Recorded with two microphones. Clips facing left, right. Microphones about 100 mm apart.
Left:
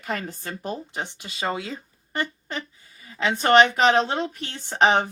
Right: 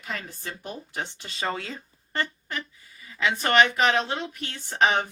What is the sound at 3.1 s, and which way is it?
A woman's voice, 30° left (ahead or behind).